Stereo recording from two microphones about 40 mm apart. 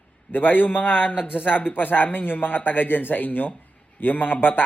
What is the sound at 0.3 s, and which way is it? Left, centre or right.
A man's voice, left.